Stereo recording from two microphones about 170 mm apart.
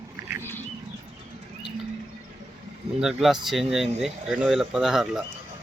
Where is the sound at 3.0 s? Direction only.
Centre (ahead or behind).